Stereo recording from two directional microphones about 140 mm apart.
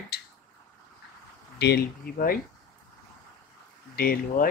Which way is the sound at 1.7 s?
90° left.